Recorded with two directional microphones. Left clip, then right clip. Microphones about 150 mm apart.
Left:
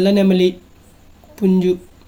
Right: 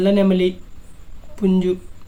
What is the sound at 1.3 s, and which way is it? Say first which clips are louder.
Speech: left 2 dB; 10° left (ahead or behind).